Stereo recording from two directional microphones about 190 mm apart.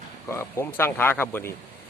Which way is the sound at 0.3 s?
15° left (ahead or behind).